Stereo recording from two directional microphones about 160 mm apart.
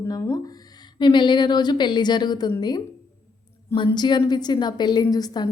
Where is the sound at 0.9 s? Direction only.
30° left (ahead or behind).